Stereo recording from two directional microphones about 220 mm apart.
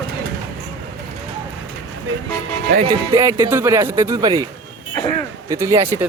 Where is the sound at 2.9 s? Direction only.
15° right (ahead or behind).